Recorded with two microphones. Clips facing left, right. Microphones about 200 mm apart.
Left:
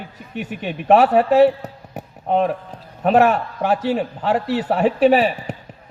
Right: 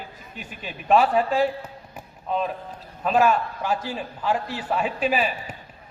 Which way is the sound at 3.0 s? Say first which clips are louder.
Left 5 dB; 70° left (ahead or behind).